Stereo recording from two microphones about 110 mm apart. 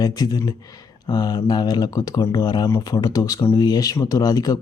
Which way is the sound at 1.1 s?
50° left (ahead or behind).